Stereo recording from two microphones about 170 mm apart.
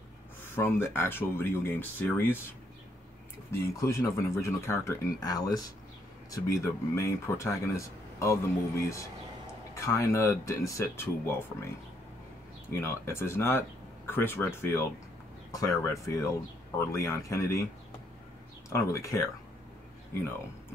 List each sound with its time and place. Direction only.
0.6 s speech: 15° left (ahead or behind)
3.5 s speech: 20° left (ahead or behind)
12.8 s speech: 15° left (ahead or behind)
18.7 s speech: 20° left (ahead or behind)